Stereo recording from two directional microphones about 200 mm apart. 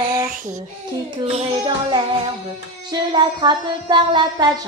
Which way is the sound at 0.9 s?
25° right (ahead or behind).